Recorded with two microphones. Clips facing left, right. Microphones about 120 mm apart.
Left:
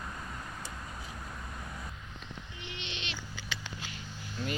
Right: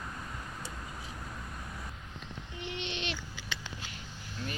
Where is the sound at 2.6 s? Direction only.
45° right (ahead or behind).